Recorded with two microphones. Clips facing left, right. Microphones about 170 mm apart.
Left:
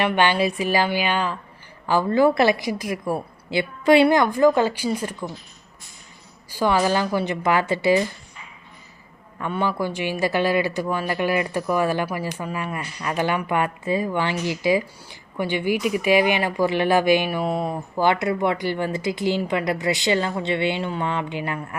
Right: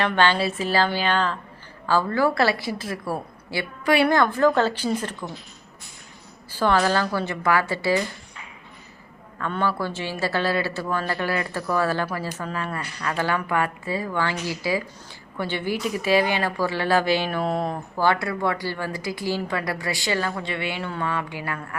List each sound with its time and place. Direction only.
0.0 s a woman's voice: 15° left (ahead or behind)
6.5 s speech: 10° left (ahead or behind)
9.4 s a woman's voice: 15° left (ahead or behind)
17.9 s a woman's voice: 20° left (ahead or behind)